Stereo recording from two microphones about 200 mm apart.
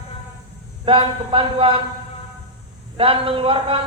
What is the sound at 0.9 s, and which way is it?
Speech, 25° right (ahead or behind).